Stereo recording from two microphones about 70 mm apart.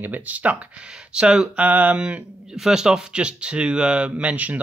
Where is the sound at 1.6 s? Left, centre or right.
Right.